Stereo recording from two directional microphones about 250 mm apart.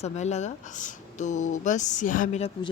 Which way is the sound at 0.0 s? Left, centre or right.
Left.